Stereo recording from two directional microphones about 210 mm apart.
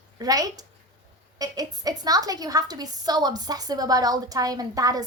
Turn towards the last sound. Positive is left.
turn(degrees=-15)  # may be behind; listen again after turning